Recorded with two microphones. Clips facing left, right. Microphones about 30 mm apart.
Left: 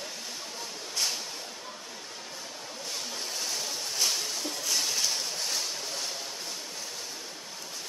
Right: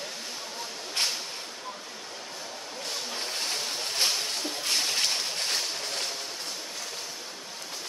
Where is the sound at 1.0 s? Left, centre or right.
Right.